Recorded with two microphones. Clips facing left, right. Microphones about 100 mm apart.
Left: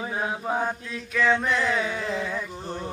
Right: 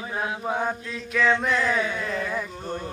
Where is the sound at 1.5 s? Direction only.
15° left (ahead or behind).